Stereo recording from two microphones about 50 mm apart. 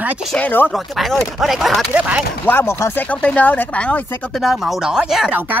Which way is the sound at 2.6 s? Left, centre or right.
Left.